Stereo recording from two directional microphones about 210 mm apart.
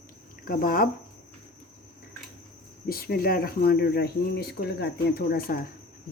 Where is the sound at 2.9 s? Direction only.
45° left (ahead or behind).